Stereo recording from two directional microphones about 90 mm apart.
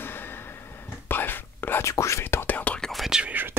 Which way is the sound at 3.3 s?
20° right (ahead or behind).